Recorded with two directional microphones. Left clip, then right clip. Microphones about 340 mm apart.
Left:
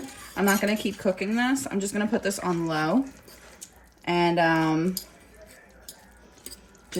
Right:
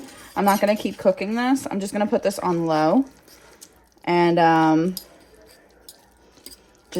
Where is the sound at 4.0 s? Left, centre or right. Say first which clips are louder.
Right 5 dB; right.